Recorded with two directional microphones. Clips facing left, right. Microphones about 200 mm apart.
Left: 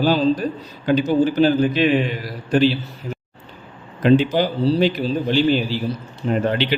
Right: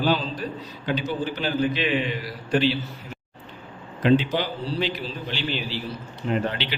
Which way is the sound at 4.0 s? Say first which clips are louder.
Left 5 dB; 45° left (ahead or behind).